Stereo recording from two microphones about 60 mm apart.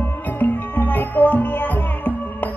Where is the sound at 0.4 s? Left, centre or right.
Left.